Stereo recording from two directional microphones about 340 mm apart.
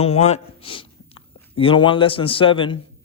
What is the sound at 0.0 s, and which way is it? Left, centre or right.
A man's voice, centre.